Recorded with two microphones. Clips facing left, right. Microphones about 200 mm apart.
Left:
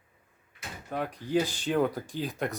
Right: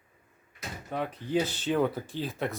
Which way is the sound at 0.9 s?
5° left (ahead or behind).